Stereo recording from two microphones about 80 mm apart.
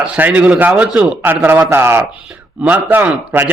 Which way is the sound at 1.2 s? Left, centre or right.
Right.